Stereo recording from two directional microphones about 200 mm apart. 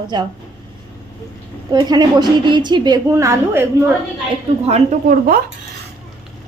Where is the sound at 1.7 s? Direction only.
20° right (ahead or behind).